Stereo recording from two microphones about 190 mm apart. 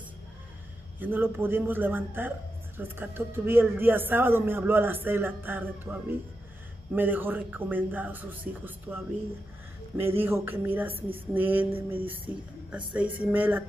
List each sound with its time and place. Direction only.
0.9 s speech: 10° right (ahead or behind)
10.0 s speech: 10° right (ahead or behind)
11.9 s music: 30° right (ahead or behind)
12.7 s speech: 5° right (ahead or behind)